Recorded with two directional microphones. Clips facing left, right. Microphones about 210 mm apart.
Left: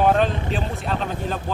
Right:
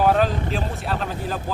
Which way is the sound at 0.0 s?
Centre (ahead or behind).